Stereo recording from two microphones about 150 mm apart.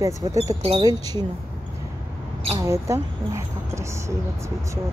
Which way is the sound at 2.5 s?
20° right (ahead or behind).